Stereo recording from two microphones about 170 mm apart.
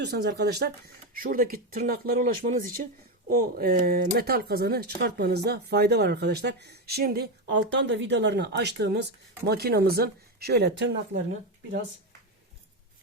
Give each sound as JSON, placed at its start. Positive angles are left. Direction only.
{"t": 0.0, "sound": "speech", "side_deg": -75}
{"t": 1.1, "sound": "speech", "side_deg": -55}